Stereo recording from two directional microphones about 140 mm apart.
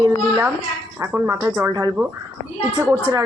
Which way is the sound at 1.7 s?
25° right (ahead or behind).